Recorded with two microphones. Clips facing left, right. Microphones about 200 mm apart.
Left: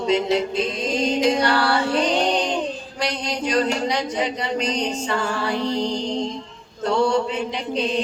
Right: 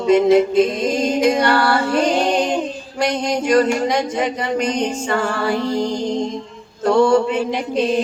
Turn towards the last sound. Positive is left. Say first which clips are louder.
# right 5 dB
turn(degrees=-50)  # may be behind; listen again after turning